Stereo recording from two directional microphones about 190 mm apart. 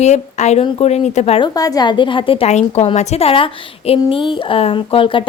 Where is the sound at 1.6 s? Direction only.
20° left (ahead or behind).